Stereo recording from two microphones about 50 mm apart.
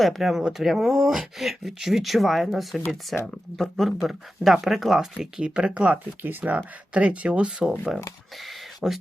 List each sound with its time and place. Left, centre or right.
0.0 s speech: centre
3.1 s speech: centre
5.1 s speech: centre
6.2 s speech: right
6.9 s speech: right
8.4 s a sound: centre